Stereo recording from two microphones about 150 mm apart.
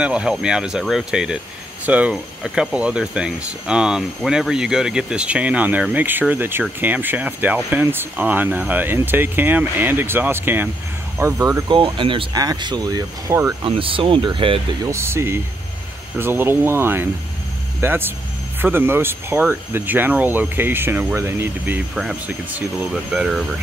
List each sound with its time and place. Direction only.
0.0 s speech: 5° right (ahead or behind)
11.7 s speech: 35° right (ahead or behind); by 13.6 s 20° right (ahead or behind)
13.7 s speech: 35° right (ahead or behind)
14.9 s speech: 20° right (ahead or behind)